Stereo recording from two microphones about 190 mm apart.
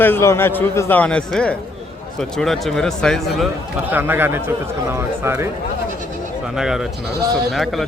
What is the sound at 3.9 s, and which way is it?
Speech, 10° right (ahead or behind).